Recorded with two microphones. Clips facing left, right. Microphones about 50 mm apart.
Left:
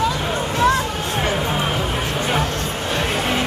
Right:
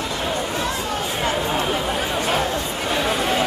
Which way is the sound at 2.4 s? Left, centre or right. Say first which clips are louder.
Even; left.